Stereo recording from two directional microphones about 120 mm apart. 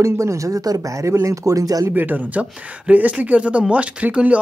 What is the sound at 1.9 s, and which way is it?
Speech, 15° right (ahead or behind).